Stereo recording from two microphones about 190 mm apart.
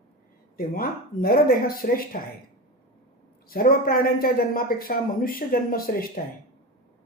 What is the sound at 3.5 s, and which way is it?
Speech, 50° left (ahead or behind).